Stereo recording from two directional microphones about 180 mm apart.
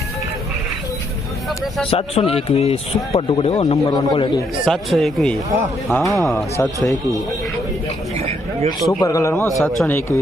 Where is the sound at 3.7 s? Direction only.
20° left (ahead or behind).